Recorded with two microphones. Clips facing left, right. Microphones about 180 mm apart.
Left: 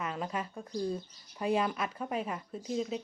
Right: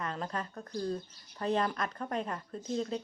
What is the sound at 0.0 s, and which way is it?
Speech, 10° left (ahead or behind).